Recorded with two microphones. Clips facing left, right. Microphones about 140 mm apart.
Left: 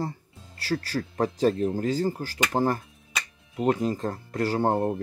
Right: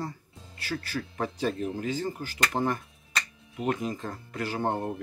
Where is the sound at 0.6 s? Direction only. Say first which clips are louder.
Left 5 dB; 35° left (ahead or behind).